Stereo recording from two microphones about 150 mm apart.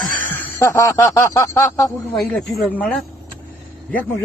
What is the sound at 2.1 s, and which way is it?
Speech, 5° left (ahead or behind).